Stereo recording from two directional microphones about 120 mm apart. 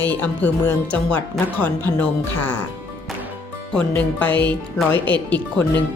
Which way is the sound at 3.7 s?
10° left (ahead or behind).